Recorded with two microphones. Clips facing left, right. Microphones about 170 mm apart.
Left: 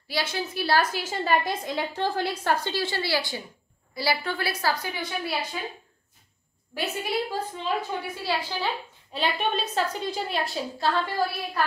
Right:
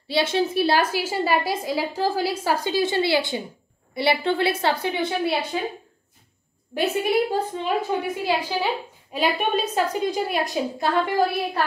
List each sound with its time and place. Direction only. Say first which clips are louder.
0.1 s a woman's voice: right 8 dB; 25° right (ahead or behind)
0.9 s a woman's voice: right 3 dB; 10° right (ahead or behind); by 5.6 s 25° right (ahead or behind)
6.7 s a woman's voice: right 7 dB; 20° right (ahead or behind)